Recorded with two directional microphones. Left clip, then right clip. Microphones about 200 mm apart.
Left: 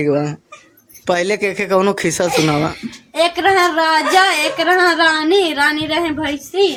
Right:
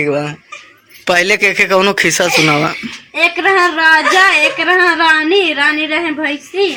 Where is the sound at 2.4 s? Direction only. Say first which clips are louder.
Right 5 dB; 5° right (ahead or behind).